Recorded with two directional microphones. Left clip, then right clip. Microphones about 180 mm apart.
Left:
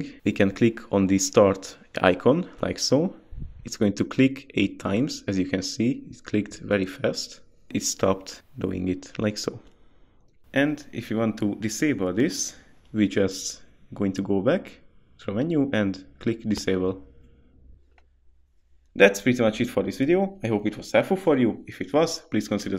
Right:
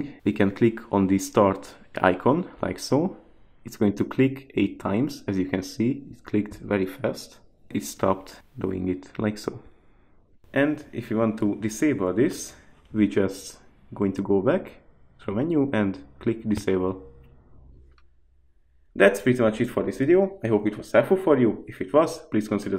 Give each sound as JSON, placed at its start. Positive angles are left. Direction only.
{"t": 0.0, "sound": "speech", "side_deg": 30}
{"t": 18.9, "sound": "speech", "side_deg": 40}